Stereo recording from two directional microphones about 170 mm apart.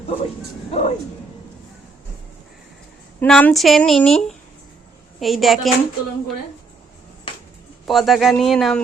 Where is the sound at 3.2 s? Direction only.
5° left (ahead or behind).